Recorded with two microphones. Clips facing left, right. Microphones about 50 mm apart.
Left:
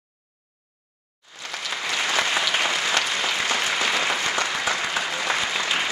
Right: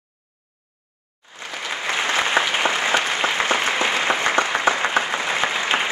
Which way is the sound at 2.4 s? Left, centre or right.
Right.